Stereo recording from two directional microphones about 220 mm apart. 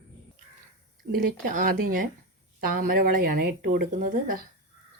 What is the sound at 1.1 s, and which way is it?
Speech, 40° right (ahead or behind).